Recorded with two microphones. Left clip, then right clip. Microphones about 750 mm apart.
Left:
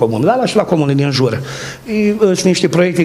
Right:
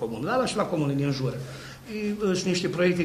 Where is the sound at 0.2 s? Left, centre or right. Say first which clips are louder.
Left 13 dB; left.